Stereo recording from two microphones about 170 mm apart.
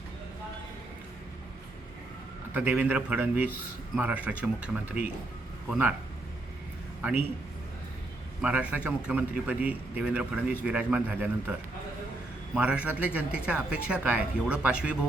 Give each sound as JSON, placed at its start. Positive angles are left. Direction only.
{"t": 2.5, "sound": "speech", "side_deg": -10}
{"t": 8.4, "sound": "speech", "side_deg": -5}
{"t": 12.5, "sound": "speech", "side_deg": -5}